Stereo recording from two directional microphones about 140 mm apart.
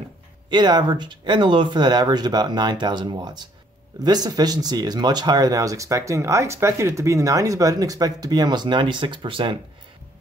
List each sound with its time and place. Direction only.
0.5 s speech: 30° right (ahead or behind)